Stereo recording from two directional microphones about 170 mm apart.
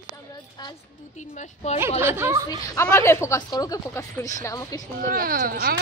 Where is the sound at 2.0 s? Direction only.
15° right (ahead or behind).